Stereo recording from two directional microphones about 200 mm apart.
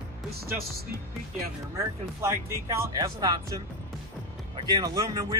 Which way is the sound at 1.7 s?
15° right (ahead or behind).